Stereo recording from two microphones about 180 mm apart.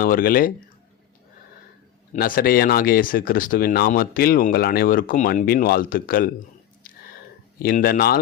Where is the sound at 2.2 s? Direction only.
50° left (ahead or behind).